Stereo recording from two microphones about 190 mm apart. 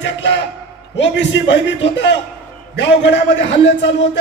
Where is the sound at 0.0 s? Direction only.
70° left (ahead or behind).